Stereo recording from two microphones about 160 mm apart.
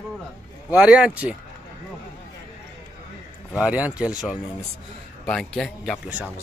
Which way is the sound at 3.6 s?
10° right (ahead or behind).